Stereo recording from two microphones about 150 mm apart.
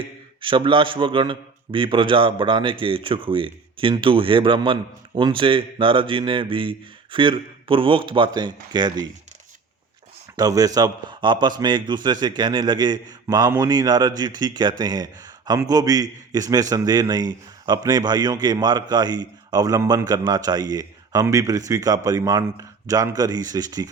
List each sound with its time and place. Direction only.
0.4 s a man's voice: 35° right (ahead or behind)
10.3 s a man's voice: 25° right (ahead or behind)